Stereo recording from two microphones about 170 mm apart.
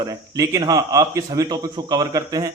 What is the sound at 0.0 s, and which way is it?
A man's voice, 20° right (ahead or behind).